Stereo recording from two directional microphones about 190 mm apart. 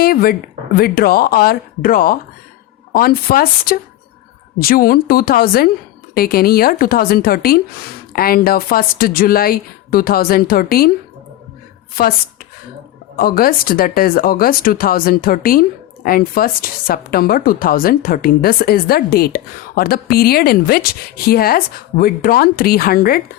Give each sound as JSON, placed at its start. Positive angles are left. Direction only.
{"t": 0.0, "sound": "speech", "side_deg": 50}
{"t": 12.0, "sound": "speech", "side_deg": 50}
{"t": 13.1, "sound": "speech", "side_deg": 50}